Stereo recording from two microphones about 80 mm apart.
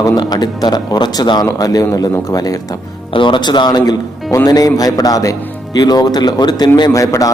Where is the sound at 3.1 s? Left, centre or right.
Left.